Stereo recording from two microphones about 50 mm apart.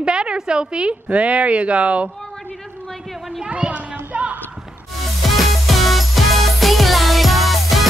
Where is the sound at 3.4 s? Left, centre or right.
Right.